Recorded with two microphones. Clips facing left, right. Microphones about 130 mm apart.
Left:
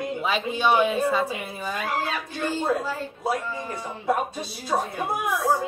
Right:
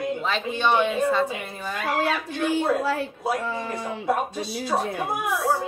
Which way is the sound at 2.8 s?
75° right (ahead or behind).